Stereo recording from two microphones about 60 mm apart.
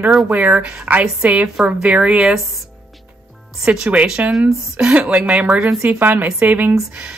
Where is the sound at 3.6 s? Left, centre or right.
Centre; by 6.7 s right.